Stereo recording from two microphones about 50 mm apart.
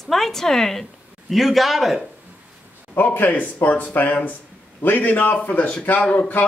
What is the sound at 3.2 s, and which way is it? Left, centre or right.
Speech, left.